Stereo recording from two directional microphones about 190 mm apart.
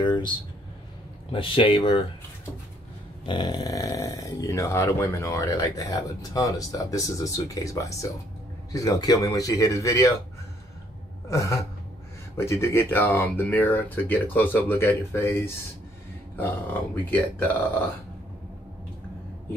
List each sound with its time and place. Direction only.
0.0 s speech: 25° left (ahead or behind)
3.3 s speech: 20° left (ahead or behind)
11.2 s speech: 15° left (ahead or behind)